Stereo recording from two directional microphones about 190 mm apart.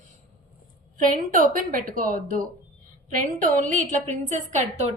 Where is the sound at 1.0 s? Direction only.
45° right (ahead or behind).